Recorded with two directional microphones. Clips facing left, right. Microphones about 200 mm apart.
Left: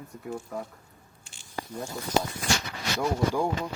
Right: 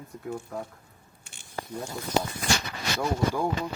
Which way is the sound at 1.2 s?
60° right (ahead or behind).